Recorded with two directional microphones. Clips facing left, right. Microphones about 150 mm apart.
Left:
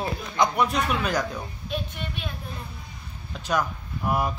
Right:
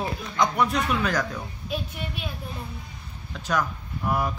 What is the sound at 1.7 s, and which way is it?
Speech, 5° right (ahead or behind).